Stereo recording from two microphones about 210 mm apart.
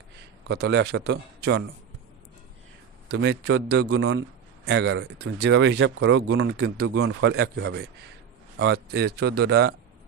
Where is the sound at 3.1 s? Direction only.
55° right (ahead or behind).